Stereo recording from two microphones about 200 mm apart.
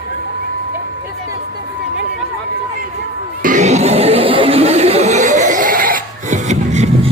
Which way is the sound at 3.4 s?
40° right (ahead or behind).